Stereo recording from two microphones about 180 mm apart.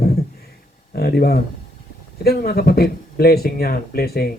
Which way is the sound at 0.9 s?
60° left (ahead or behind).